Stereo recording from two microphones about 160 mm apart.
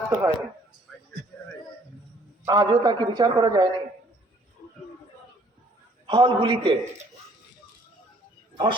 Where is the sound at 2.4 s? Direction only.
20° right (ahead or behind).